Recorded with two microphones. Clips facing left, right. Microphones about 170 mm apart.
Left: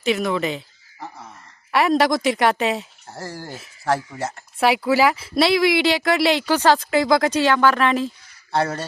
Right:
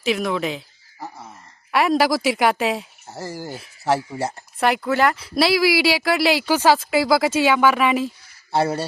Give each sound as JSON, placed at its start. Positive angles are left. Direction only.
{"t": 0.0, "sound": "a sound", "side_deg": 0}
{"t": 1.7, "sound": "speech", "side_deg": 0}
{"t": 4.1, "sound": "speech", "side_deg": -15}
{"t": 4.6, "sound": "speech", "side_deg": 0}